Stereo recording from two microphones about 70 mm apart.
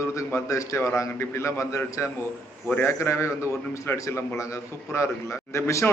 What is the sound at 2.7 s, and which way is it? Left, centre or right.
A man's voice, left.